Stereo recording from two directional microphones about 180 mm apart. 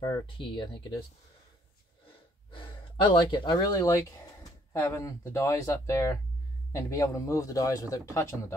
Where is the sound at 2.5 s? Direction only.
25° left (ahead or behind).